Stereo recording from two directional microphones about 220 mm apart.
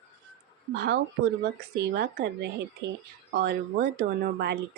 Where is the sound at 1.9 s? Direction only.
45° right (ahead or behind).